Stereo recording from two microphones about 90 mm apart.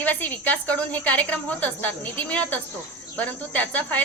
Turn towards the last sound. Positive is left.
turn(degrees=15)  # may be behind; listen again after turning